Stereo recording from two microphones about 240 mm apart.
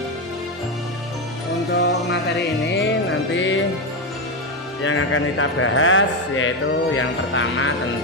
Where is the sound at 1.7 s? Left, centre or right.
Left.